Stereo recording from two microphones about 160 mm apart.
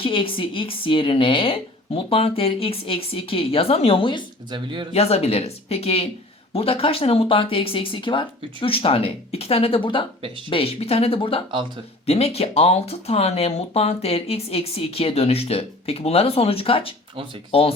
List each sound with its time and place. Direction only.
0.0 s speech: 35° left (ahead or behind)
4.5 s speech: 30° right (ahead or behind)
4.9 s speech: 40° left (ahead or behind)